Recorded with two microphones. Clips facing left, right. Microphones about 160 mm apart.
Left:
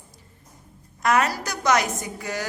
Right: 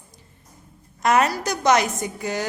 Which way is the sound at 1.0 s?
25° right (ahead or behind).